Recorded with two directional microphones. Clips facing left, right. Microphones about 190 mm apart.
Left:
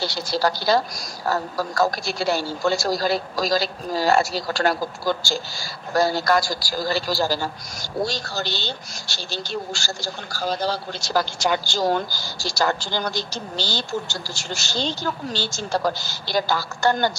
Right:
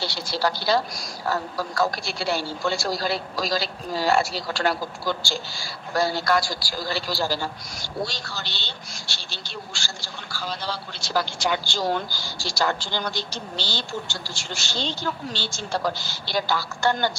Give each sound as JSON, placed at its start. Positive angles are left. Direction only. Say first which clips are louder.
{"t": 0.0, "sound": "speech", "louder": "left 3 dB", "side_deg": 40}